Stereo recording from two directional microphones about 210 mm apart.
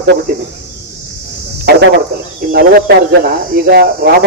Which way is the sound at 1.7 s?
50° right (ahead or behind).